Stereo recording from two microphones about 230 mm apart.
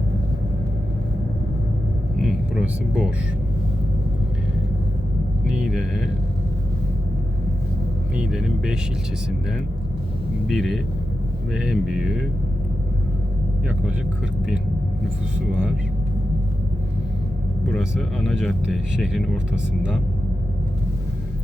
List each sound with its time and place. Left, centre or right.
2.2 s vehicle: centre
5.5 s speech: centre
8.1 s speech: centre
10.5 s speech: centre
17.7 s speech: centre